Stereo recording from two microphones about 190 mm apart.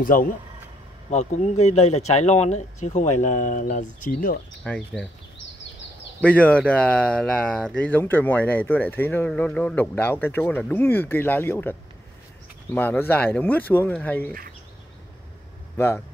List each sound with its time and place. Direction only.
0.0 s speech: 45° left (ahead or behind)
1.1 s speech: 35° left (ahead or behind)
4.6 s speech: 5° left (ahead or behind)
6.2 s speech: 5° left (ahead or behind)
12.7 s speech: 10° left (ahead or behind)